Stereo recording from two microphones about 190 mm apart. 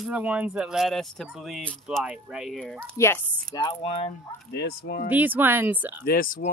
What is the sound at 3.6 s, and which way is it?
Speech, 30° left (ahead or behind).